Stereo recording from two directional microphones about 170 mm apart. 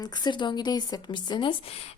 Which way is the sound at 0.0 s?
25° left (ahead or behind).